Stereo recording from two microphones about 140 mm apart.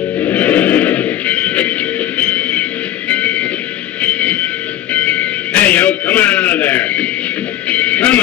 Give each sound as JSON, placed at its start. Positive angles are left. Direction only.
{"t": 0.2, "sound": "music", "side_deg": 10}